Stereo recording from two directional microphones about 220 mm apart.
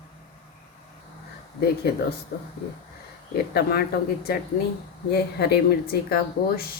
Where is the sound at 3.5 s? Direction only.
45° left (ahead or behind).